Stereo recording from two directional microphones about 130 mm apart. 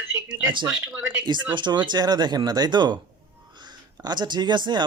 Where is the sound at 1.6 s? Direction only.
35° right (ahead or behind).